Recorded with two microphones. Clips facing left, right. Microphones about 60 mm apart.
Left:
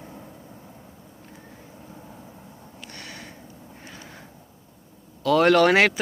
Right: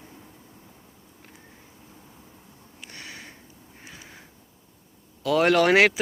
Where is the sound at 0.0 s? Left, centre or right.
Left.